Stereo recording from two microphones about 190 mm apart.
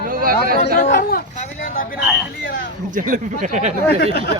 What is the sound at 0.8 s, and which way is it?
Speech, 45° left (ahead or behind).